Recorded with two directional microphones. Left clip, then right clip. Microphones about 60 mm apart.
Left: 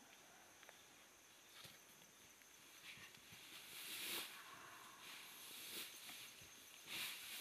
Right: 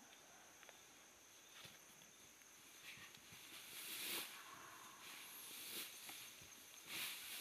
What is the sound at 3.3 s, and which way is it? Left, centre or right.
Hiss, right.